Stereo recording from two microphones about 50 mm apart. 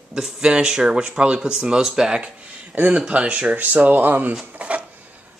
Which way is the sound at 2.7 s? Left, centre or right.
Right.